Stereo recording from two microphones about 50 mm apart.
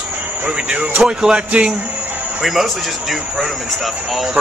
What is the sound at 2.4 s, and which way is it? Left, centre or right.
A man's voice, centre.